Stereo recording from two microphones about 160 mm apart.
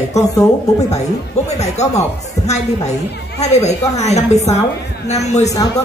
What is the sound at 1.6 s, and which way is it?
Speech, 45° left (ahead or behind).